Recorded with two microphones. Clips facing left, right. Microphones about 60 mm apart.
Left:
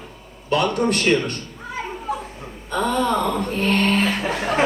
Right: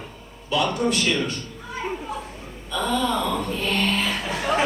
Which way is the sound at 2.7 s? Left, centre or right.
Left.